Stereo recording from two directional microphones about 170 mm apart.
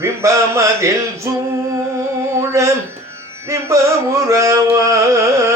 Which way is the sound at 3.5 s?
20° right (ahead or behind).